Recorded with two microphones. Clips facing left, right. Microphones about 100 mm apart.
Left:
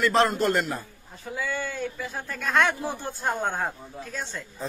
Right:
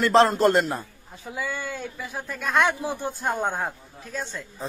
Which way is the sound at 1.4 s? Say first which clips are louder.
Left 1 dB; 10° right (ahead or behind).